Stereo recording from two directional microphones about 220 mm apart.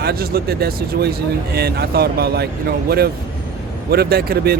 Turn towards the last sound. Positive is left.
turn(degrees=-45)  # may be behind; listen again after turning